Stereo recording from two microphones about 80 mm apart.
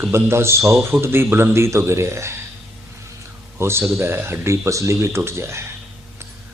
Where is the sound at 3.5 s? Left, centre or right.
Right.